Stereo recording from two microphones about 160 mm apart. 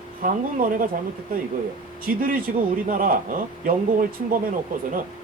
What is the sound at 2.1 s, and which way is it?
A man's voice, 65° right (ahead or behind).